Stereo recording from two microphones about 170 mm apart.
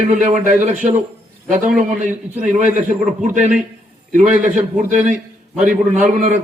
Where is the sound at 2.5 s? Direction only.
45° right (ahead or behind).